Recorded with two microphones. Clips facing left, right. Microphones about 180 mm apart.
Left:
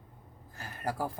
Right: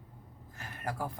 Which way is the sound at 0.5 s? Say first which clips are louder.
Left 3 dB; 35° left (ahead or behind).